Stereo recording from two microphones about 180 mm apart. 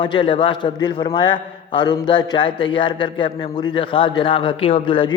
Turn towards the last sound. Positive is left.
turn(degrees=25)  # may be behind; listen again after turning